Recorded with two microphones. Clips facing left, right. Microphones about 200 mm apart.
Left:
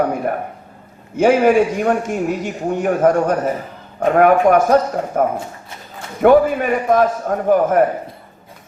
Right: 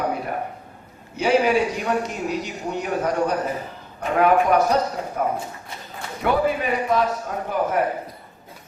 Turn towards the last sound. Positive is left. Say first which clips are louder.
# left 9 dB
turn(degrees=50)  # may be behind; listen again after turning